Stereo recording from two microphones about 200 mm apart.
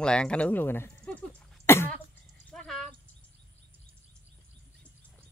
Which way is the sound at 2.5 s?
Centre (ahead or behind).